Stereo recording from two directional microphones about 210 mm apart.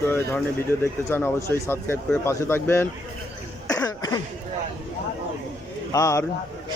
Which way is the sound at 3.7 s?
20° left (ahead or behind).